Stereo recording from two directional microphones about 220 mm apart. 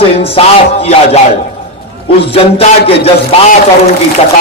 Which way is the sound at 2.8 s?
25° left (ahead or behind).